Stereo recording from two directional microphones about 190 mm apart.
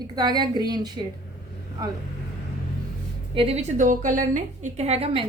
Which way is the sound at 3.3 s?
30° right (ahead or behind).